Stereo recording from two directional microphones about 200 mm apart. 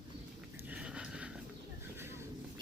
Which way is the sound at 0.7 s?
5° right (ahead or behind).